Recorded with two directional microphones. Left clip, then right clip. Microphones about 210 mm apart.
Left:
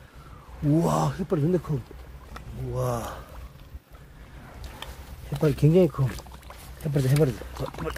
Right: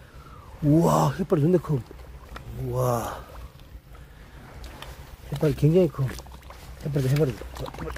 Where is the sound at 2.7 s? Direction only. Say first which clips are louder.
Right 4 dB; 30° right (ahead or behind).